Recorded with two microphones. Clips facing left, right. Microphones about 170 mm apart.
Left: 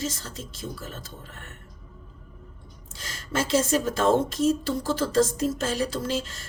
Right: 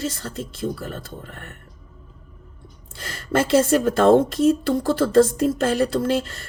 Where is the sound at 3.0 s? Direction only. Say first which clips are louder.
Right 7 dB; 55° right (ahead or behind).